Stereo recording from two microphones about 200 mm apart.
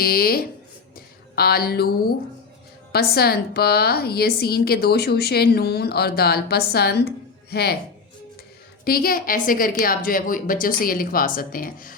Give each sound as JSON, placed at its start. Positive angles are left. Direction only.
{"t": 0.0, "sound": "a woman's voice", "side_deg": 50}
{"t": 0.9, "sound": "a sound", "side_deg": 50}
{"t": 2.9, "sound": "a woman's voice", "side_deg": 50}
{"t": 8.8, "sound": "a woman's voice", "side_deg": 50}